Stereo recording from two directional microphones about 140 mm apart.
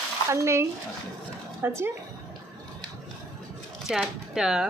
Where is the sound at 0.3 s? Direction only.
20° right (ahead or behind).